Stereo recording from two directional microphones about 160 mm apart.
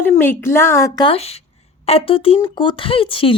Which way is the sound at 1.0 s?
40° left (ahead or behind).